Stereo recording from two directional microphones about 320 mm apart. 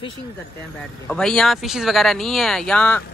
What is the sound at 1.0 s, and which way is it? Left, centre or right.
Speech, centre.